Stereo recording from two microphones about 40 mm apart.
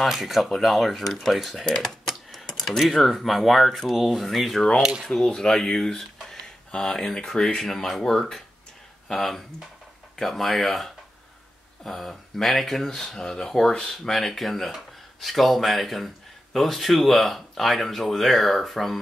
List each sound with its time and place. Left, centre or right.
0.0 s speech: centre
1.9 s typing: centre
2.6 s speech: centre